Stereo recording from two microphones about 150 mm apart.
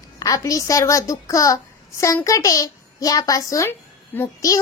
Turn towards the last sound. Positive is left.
turn(degrees=20)  # may be behind; listen again after turning